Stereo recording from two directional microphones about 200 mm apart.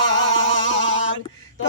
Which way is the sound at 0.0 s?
70° left (ahead or behind).